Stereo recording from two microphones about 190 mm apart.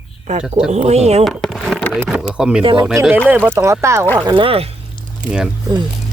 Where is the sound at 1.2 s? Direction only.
Centre (ahead or behind); by 4.0 s 15° right (ahead or behind).